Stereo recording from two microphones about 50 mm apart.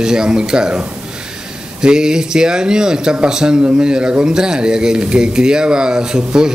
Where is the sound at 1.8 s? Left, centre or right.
Centre.